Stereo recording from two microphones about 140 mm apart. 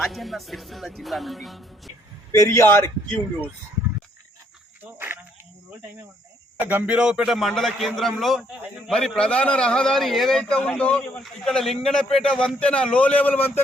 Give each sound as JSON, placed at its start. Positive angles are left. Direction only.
{"t": 0.0, "sound": "a man's voice", "side_deg": 0}
{"t": 2.3, "sound": "a man's voice", "side_deg": 20}
{"t": 4.8, "sound": "cricket", "side_deg": -15}
{"t": 6.6, "sound": "a man's voice", "side_deg": -15}